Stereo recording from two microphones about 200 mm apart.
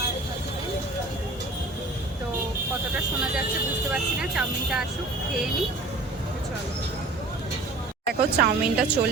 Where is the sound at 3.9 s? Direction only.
5° right (ahead or behind).